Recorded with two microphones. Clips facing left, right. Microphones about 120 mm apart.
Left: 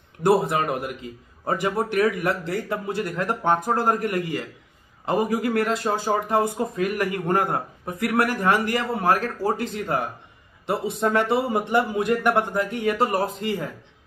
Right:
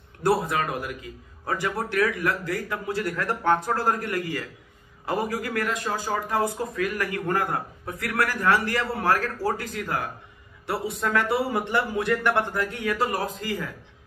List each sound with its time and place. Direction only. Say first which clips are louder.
0.2 s speech: left 4 dB; 25° left (ahead or behind)